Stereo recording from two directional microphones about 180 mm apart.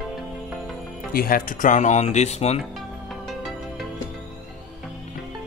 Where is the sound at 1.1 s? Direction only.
55° left (ahead or behind); by 2.6 s 35° left (ahead or behind).